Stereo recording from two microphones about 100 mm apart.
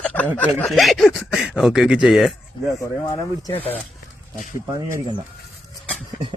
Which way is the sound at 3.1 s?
40° left (ahead or behind).